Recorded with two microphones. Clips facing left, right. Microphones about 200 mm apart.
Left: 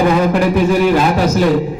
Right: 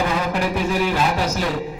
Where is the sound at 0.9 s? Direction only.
55° left (ahead or behind).